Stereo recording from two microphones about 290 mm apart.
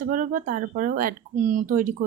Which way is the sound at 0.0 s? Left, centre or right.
Right.